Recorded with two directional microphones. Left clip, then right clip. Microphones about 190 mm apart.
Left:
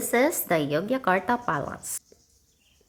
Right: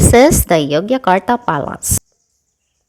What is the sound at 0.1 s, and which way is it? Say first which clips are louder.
A woman's voice: right 13 dB; 40° right (ahead or behind).